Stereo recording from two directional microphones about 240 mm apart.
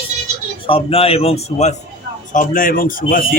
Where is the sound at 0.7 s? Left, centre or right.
Left.